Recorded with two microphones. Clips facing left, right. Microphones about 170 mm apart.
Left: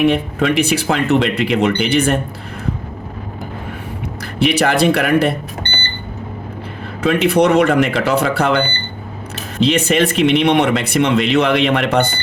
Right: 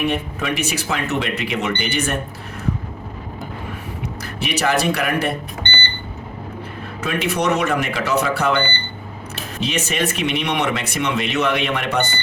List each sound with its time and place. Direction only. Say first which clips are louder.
0.0 s speech: left 7 dB; 60° left (ahead or behind)
4.2 s speech: left 8 dB; 60° left (ahead or behind)
7.0 s speech: left 8 dB; 60° left (ahead or behind)